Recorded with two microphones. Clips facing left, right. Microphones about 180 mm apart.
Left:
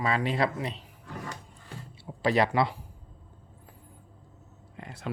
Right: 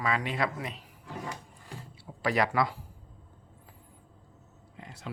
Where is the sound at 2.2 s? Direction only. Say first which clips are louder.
Left 3 dB; 25° left (ahead or behind).